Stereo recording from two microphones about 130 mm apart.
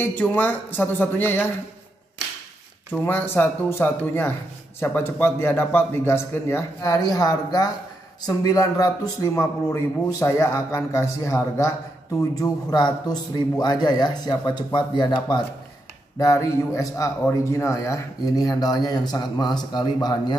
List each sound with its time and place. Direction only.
0.1 s a man's voice: 15° left (ahead or behind)
2.9 s a man's voice: 15° left (ahead or behind)
6.9 s speech: 30° left (ahead or behind)